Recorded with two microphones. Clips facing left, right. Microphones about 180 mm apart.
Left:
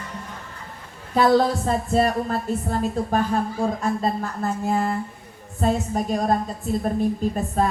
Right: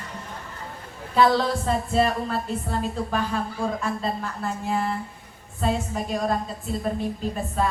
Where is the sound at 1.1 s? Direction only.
45° left (ahead or behind).